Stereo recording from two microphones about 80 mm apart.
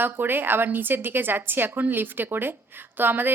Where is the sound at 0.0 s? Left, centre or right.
Right.